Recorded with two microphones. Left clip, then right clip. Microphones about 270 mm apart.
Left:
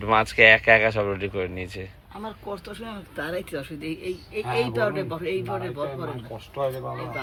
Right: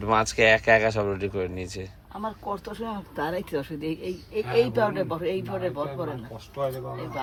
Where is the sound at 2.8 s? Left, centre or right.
Right.